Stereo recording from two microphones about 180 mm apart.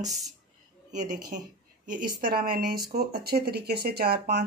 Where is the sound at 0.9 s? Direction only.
45° right (ahead or behind).